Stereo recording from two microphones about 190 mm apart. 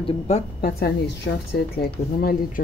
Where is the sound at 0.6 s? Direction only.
55° left (ahead or behind).